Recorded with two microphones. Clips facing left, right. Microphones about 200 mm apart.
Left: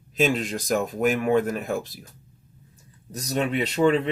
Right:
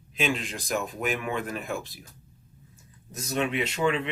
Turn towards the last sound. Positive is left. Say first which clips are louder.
# left 6 dB
turn(degrees=40)  # may be behind; listen again after turning